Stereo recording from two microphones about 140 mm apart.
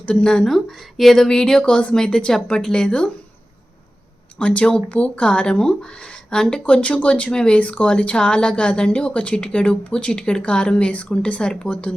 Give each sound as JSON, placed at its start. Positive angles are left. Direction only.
{"t": 0.0, "sound": "speech", "side_deg": 5}
{"t": 4.4, "sound": "speech", "side_deg": 10}